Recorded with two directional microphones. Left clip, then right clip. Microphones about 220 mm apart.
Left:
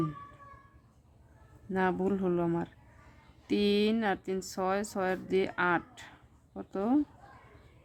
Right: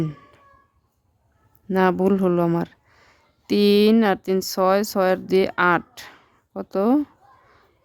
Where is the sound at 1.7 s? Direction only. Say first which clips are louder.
Right 11 dB; 50° right (ahead or behind).